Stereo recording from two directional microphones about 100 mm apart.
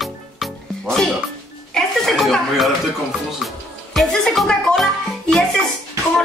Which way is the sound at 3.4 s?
Centre (ahead or behind).